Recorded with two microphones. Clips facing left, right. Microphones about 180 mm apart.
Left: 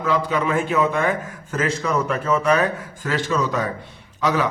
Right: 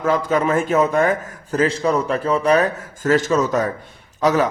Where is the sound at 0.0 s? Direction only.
45° right (ahead or behind).